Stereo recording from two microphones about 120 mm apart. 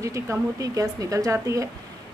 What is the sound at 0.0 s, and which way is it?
A woman's voice, 25° right (ahead or behind).